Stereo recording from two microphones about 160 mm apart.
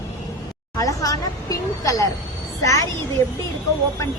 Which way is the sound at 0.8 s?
20° left (ahead or behind).